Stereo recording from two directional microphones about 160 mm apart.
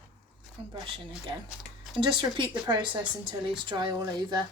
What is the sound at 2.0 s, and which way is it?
Speech, 30° right (ahead or behind).